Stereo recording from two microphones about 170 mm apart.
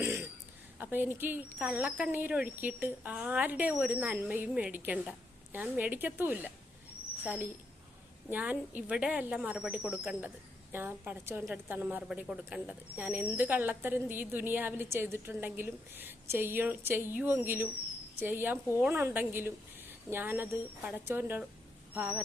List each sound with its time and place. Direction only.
0.0 s a sound: 15° right (ahead or behind)
0.8 s speech: 10° right (ahead or behind)
8.3 s speech: 10° right (ahead or behind)